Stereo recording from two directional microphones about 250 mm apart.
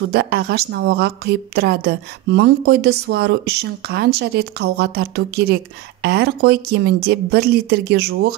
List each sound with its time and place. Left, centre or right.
0.1 s speech: right